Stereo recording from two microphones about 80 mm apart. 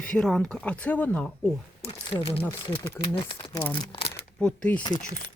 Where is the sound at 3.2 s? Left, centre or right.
Left.